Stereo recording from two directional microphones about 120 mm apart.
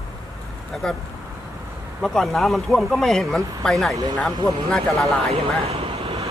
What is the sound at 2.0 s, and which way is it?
Speech, 5° left (ahead or behind).